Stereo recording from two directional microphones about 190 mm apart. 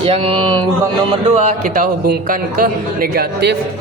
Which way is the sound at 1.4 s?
40° right (ahead or behind).